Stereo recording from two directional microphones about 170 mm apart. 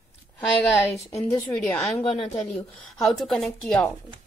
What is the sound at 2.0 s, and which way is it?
Speech, 30° left (ahead or behind).